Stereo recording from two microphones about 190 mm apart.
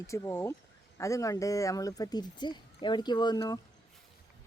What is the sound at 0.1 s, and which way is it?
Speech, 15° left (ahead or behind).